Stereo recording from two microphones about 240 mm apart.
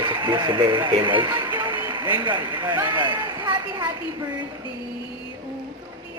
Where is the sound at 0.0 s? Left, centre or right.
Centre.